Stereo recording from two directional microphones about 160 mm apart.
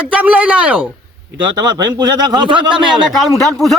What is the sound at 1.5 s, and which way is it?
Speech, 25° right (ahead or behind).